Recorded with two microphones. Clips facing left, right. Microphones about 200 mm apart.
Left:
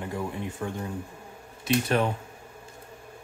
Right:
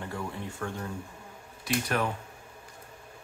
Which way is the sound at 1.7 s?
25° left (ahead or behind).